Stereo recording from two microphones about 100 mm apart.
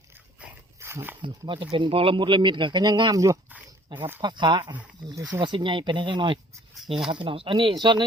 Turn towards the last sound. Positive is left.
turn(degrees=-50)  # may be behind; listen again after turning